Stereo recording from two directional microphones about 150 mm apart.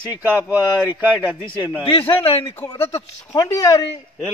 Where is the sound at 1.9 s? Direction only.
35° left (ahead or behind).